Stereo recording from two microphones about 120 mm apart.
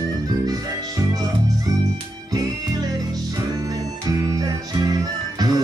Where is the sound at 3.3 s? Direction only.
30° right (ahead or behind).